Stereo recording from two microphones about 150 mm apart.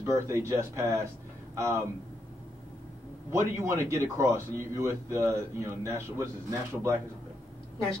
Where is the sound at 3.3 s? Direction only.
20° right (ahead or behind).